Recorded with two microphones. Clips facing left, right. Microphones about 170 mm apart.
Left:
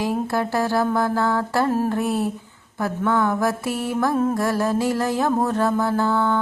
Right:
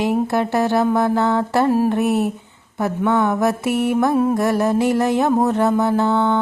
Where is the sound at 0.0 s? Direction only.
20° right (ahead or behind).